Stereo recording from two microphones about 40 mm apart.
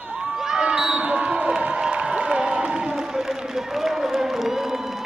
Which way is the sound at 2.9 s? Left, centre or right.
Centre.